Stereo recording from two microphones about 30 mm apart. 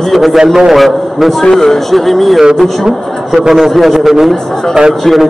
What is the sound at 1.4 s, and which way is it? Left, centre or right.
Speech, centre.